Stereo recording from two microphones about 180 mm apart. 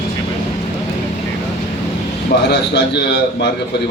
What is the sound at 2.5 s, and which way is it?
A man's voice, 70° left (ahead or behind).